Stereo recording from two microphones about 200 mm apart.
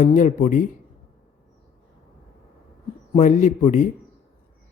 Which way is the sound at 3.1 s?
35° left (ahead or behind).